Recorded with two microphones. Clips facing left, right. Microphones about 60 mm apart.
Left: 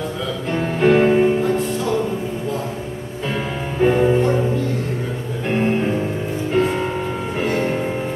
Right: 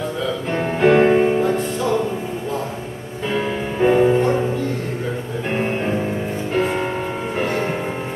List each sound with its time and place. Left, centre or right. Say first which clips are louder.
0.8 s music: even; centre
3.8 s music: right 1 dB; centre